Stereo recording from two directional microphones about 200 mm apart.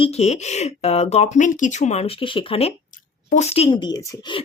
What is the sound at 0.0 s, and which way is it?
Speech, 35° left (ahead or behind).